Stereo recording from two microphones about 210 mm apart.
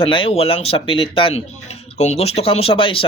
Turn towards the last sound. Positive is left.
turn(degrees=25)  # may be behind; listen again after turning